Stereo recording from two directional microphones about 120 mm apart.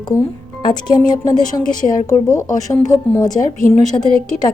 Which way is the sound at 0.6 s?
35° left (ahead or behind).